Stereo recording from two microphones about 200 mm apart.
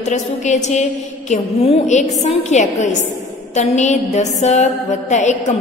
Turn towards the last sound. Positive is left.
turn(degrees=35)  # may be behind; listen again after turning